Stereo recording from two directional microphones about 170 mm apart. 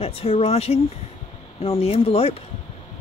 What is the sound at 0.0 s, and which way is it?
Speech, 35° left (ahead or behind).